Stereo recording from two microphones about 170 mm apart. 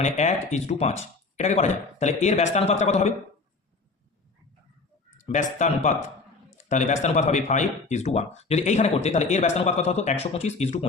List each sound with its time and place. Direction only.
0.0 s speech: 45° left (ahead or behind)
5.2 s speech: 45° left (ahead or behind)